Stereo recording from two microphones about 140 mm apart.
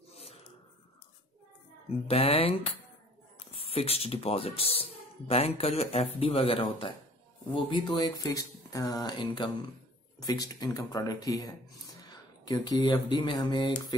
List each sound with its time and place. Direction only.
2.0 s speech: 45° left (ahead or behind); by 11.5 s 30° left (ahead or behind)
12.1 s a sound: 30° left (ahead or behind)
13.1 s speech: 35° left (ahead or behind)